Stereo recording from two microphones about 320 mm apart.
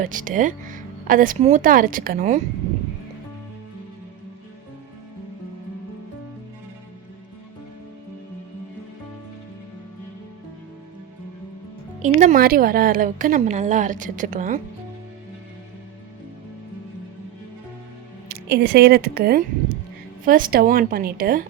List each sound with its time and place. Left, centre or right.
0.0 s speech: right
12.0 s a woman's voice: right
18.4 s a woman's voice: right